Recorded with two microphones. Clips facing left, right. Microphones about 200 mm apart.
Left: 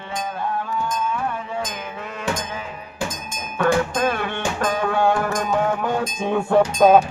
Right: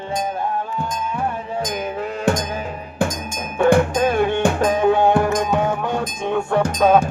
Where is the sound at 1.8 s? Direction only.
35° right (ahead or behind).